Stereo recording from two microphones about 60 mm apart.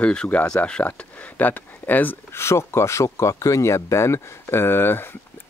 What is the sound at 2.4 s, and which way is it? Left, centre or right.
Speech, left.